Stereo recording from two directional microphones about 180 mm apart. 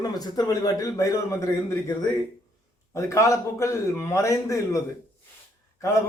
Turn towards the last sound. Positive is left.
turn(degrees=15)  # may be behind; listen again after turning